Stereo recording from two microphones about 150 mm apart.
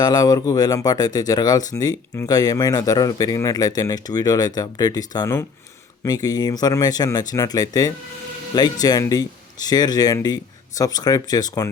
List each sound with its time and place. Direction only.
0.0 s speech: 25° left (ahead or behind)